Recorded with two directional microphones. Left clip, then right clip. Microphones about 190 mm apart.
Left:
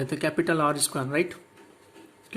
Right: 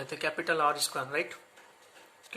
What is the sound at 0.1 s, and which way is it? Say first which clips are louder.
Speech: left 4 dB; 15° left (ahead or behind).